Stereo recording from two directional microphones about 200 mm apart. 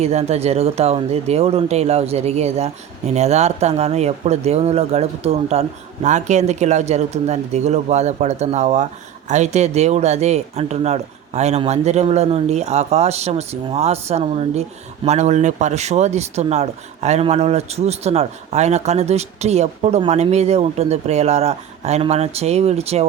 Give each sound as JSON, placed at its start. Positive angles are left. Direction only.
{"t": 0.0, "sound": "speech", "side_deg": -35}